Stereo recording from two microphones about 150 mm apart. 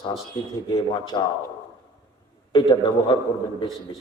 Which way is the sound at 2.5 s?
30° left (ahead or behind).